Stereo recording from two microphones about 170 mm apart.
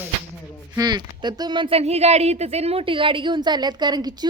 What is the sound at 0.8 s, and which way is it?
Speech, 25° right (ahead or behind).